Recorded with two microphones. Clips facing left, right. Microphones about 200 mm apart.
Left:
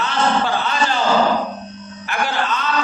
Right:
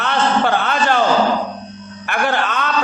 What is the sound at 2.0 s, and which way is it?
Music, 60° right (ahead or behind).